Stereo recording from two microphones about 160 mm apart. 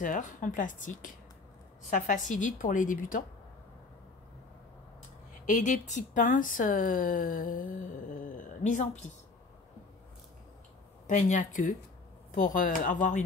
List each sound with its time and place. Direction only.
0.0 s a woman's voice: 55° left (ahead or behind)
5.5 s speech: 50° left (ahead or behind)
11.1 s a woman's voice: 50° left (ahead or behind)